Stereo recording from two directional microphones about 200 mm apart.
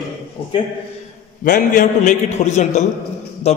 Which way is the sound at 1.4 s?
40° left (ahead or behind).